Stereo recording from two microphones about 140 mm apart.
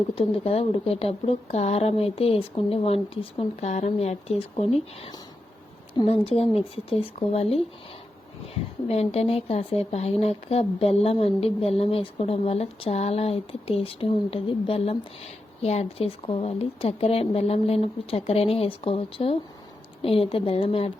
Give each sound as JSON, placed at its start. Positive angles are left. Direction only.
{"t": 0.2, "sound": "a woman's voice", "side_deg": 45}
{"t": 8.9, "sound": "a woman's voice", "side_deg": 45}